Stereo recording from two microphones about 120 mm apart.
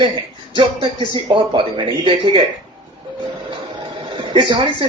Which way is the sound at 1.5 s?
40° right (ahead or behind).